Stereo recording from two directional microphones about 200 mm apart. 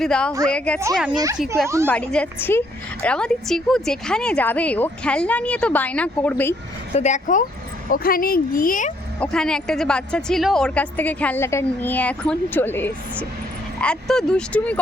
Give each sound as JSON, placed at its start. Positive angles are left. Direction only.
{"t": 0.0, "sound": "speech", "side_deg": 5}
{"t": 1.6, "sound": "a woman's voice", "side_deg": -15}
{"t": 1.9, "sound": "a woman's voice", "side_deg": 5}
{"t": 6.9, "sound": "speech", "side_deg": 35}
{"t": 9.2, "sound": "a woman's voice", "side_deg": 5}